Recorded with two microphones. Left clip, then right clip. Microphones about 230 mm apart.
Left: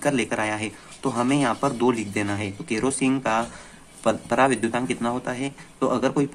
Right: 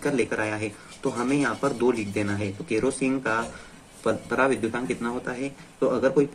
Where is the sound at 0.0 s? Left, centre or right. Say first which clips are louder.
Left 2 dB; left.